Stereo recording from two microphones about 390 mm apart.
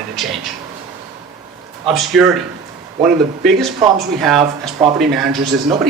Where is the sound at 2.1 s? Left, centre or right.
Centre.